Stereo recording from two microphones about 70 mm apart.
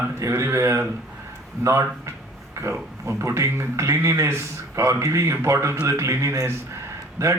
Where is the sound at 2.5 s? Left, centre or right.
Right.